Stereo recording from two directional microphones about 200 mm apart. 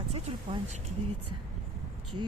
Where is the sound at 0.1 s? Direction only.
30° right (ahead or behind).